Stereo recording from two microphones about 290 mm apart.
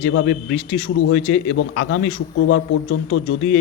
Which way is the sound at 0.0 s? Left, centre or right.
Left.